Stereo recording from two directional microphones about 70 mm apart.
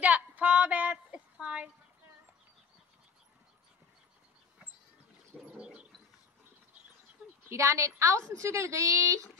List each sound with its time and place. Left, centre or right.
0.0 s a sound: right
5.6 s dog: centre
7.4 s a woman's voice: right